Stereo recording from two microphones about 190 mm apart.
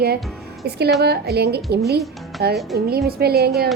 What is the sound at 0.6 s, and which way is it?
Speech, 60° right (ahead or behind).